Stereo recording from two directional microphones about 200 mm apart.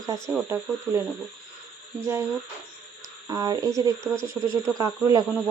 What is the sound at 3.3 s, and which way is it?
Speech, 15° right (ahead or behind).